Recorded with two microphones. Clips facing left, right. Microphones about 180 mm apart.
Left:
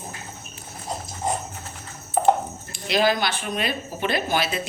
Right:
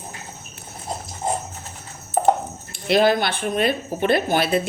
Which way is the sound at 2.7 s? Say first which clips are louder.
Right 4 dB; 55° right (ahead or behind).